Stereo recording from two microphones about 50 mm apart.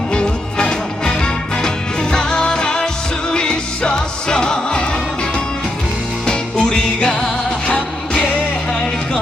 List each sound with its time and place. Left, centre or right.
0.1 s music: left
6.2 s music: centre